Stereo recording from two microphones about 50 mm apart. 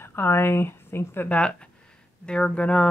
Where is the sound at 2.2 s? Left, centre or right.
Centre.